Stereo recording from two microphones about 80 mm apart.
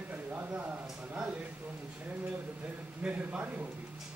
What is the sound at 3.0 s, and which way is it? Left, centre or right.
Speech, centre.